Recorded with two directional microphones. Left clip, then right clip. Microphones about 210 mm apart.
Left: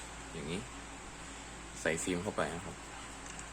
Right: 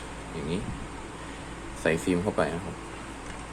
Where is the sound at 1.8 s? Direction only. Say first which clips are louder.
Right 8 dB; centre (ahead or behind).